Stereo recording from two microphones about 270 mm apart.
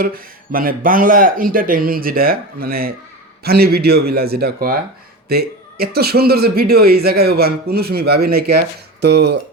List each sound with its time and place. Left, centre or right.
0.0 s speech: right